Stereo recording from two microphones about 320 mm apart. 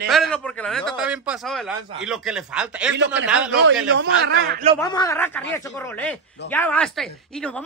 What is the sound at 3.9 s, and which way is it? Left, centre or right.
Speech, right.